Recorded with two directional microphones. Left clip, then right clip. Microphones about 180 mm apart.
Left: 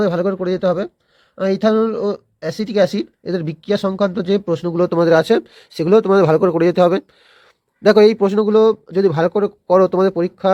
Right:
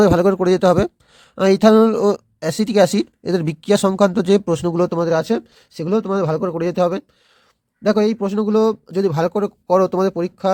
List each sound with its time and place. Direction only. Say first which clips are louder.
0.0 s speech: right 4 dB; 40° right (ahead or behind)
4.9 s a man's voice: left 5 dB; 15° right (ahead or behind)